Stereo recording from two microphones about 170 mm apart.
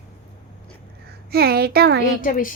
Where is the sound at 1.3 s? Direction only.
65° right (ahead or behind).